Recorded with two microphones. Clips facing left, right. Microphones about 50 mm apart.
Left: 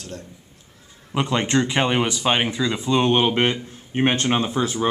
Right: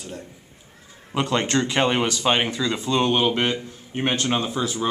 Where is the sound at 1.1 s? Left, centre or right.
Centre.